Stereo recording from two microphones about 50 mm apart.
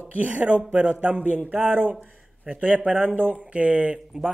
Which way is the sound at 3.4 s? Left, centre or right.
Right.